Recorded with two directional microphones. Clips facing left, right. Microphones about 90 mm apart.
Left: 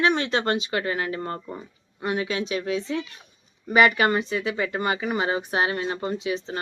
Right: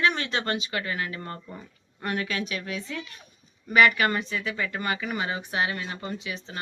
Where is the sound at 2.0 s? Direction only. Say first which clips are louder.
Left 3 dB; 20° left (ahead or behind).